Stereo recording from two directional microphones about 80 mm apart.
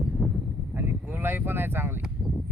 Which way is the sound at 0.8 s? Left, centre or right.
Right.